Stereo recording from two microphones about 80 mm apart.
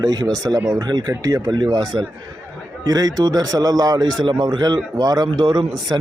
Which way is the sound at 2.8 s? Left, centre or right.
Right.